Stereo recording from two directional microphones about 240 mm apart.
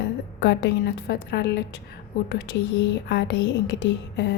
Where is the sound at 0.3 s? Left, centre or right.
Left.